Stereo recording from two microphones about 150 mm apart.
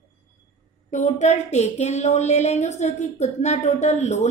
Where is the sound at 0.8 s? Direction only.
55° left (ahead or behind).